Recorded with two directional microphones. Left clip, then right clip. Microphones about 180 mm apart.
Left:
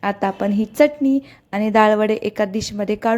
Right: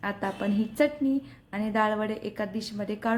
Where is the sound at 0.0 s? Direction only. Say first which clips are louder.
Left 10 dB; 45° left (ahead or behind).